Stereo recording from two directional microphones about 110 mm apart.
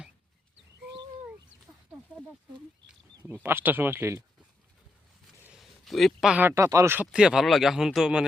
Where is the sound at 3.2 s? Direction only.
20° right (ahead or behind).